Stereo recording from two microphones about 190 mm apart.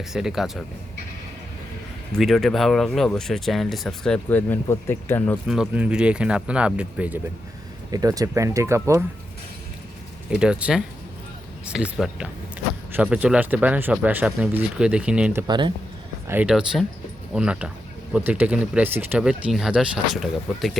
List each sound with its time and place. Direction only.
0.1 s speech: centre (ahead or behind)
2.1 s speech: centre (ahead or behind)
5.5 s speech: 5° right (ahead or behind)
7.9 s speech: 20° right (ahead or behind)
10.3 s speech: 5° right (ahead or behind)
15.4 s speech: 25° right (ahead or behind)
16.2 s speech: 10° right (ahead or behind)